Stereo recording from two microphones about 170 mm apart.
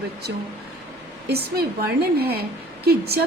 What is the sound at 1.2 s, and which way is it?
A woman's voice, 70° right (ahead or behind).